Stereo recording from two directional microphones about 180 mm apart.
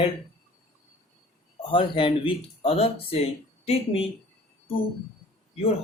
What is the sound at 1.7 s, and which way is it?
Speech, 25° left (ahead or behind).